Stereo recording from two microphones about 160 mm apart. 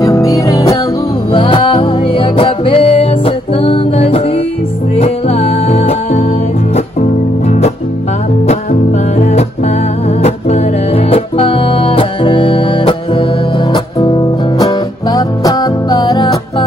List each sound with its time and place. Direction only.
0.0 s music: 20° left (ahead or behind)
1.3 s music: 30° left (ahead or behind)
7.4 s music: 45° left (ahead or behind)
9.2 s music: 45° left (ahead or behind); by 16.6 s 25° left (ahead or behind)